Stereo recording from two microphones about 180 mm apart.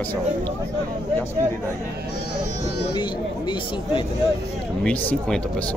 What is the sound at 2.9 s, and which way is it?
Speech, 25° left (ahead or behind).